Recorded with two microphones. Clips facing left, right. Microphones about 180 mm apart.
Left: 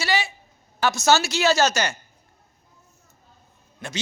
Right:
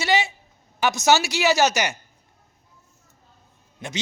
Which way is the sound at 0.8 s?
15° right (ahead or behind).